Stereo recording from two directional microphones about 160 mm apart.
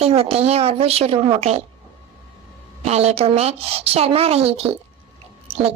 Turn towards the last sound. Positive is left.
turn(degrees=-40)  # may be behind; listen again after turning